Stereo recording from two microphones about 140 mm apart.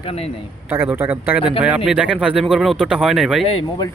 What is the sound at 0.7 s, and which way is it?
Speech, 15° right (ahead or behind).